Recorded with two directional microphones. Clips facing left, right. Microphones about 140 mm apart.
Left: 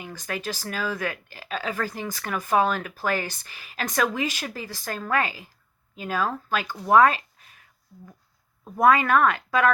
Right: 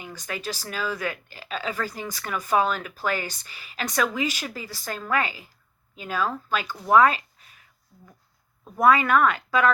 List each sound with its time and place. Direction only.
0.0 s speech: 40° left (ahead or behind)
6.9 s a sound: 40° left (ahead or behind)
8.8 s speech: 40° left (ahead or behind)